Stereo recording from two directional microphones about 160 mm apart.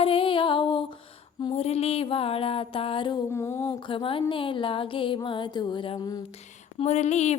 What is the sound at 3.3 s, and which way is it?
Music, 15° left (ahead or behind).